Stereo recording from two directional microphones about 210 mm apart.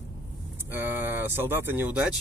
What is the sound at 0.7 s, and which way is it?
Speech, 10° right (ahead or behind).